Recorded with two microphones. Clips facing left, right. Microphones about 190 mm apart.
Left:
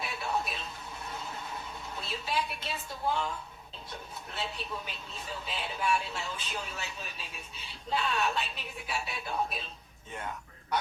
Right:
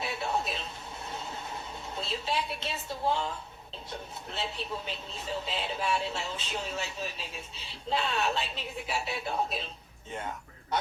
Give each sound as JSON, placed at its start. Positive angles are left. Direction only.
{"t": 0.0, "sound": "television", "side_deg": -25}
{"t": 1.1, "sound": "a sound", "side_deg": -25}
{"t": 4.4, "sound": "speech", "side_deg": -25}
{"t": 10.7, "sound": "a man's voice", "side_deg": -25}